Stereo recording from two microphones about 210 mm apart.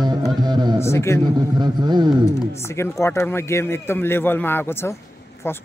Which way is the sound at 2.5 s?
10° left (ahead or behind).